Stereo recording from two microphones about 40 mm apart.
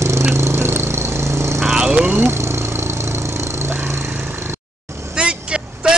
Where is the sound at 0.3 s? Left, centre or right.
Right.